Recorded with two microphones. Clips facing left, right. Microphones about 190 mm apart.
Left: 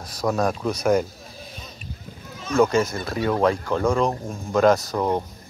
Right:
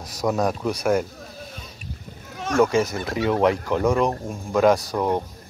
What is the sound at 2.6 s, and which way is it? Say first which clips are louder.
Speech: even; 10° right (ahead or behind).